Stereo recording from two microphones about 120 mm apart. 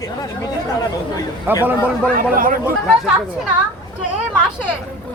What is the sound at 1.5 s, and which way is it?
Speech, 15° right (ahead or behind).